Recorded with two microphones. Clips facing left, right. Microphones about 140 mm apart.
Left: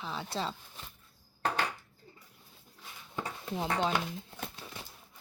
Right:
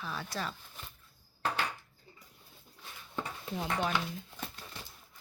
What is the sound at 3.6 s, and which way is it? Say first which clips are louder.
Speech: left 2 dB; 20° left (ahead or behind).